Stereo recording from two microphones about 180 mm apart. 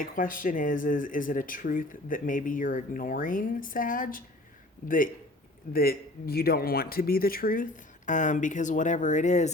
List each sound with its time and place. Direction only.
0.0 s speech: 50° left (ahead or behind)
5.7 s speech: 55° left (ahead or behind)